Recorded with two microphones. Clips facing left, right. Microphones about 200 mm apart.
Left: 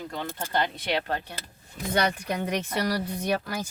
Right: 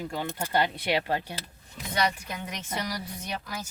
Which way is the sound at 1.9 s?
50° left (ahead or behind).